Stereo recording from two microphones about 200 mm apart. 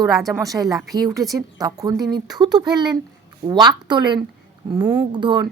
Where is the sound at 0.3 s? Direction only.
15° right (ahead or behind).